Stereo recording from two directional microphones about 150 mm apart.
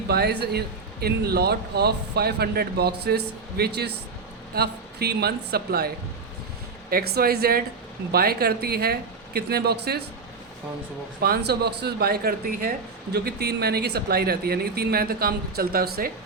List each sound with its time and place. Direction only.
0.1 s speech: 90° right
6.9 s speech: 90° right
11.2 s speech: 90° right
13.1 s speech: 90° right